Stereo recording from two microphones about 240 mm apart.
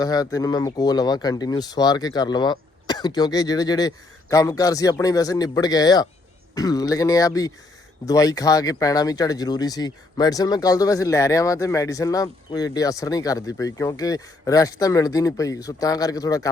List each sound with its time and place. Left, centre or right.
0.0 s speech: centre